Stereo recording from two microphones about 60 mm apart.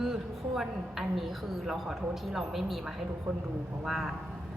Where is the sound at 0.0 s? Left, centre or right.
Centre.